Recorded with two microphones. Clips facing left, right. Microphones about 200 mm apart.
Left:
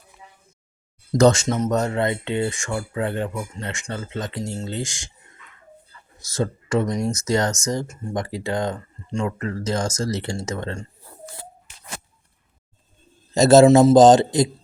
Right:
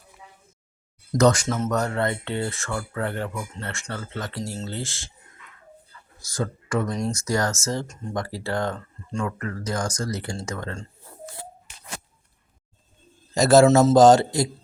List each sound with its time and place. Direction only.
1.2 s speech: 25° left (ahead or behind)
6.1 s speech: 25° left (ahead or behind)
13.3 s speech: 25° left (ahead or behind)